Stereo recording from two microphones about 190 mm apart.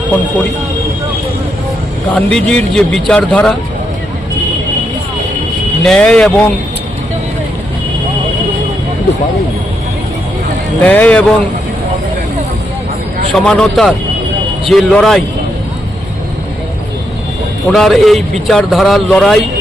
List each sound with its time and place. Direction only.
2.1 s a man's voice: 5° left (ahead or behind)
5.8 s a man's voice: 5° left (ahead or behind)
10.8 s speech: 5° left (ahead or behind)
13.3 s a man's voice: 5° left (ahead or behind)
17.7 s a man's voice: centre (ahead or behind)